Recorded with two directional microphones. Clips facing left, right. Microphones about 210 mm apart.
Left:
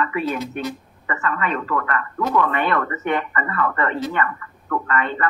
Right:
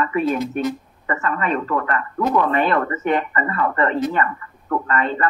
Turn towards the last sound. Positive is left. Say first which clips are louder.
# right 2 dB
turn(degrees=-30)  # may be behind; listen again after turning